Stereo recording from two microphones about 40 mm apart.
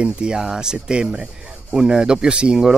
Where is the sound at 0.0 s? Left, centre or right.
Right.